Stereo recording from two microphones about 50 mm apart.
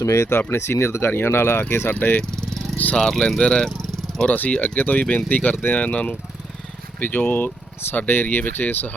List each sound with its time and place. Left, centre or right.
0.0 s speech: left
0.3 s speech: left
1.9 s speech: left
2.9 s speech: centre
4.4 s speech: left